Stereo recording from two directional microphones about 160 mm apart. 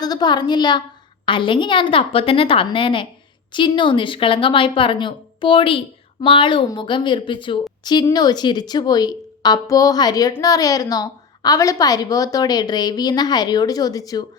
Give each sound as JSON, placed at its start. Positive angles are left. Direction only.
{"t": 0.0, "sound": "a woman's voice", "side_deg": 25}